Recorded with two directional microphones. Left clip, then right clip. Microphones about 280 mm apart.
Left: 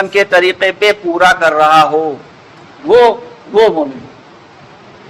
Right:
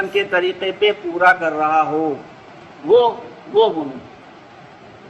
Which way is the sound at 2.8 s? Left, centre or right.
Left.